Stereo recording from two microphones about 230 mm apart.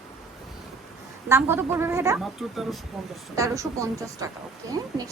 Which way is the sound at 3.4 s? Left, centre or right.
Centre.